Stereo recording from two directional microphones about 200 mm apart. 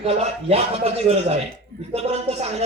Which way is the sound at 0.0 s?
30° right (ahead or behind).